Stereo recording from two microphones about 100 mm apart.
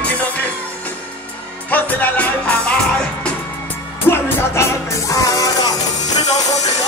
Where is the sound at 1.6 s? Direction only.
15° left (ahead or behind).